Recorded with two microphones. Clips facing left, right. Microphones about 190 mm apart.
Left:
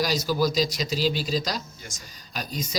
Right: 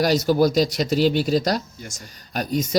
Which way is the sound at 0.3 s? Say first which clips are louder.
Right 6 dB; 60° right (ahead or behind).